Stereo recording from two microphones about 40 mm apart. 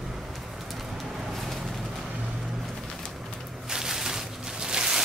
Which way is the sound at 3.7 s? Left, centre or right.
Centre.